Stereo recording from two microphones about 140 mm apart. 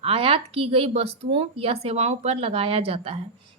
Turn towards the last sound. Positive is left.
turn(degrees=-45)  # may be behind; listen again after turning